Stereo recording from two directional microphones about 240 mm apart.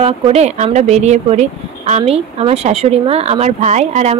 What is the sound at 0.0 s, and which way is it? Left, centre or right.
Speech, right.